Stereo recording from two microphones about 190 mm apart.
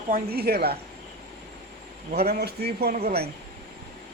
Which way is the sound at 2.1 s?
55° right (ahead or behind).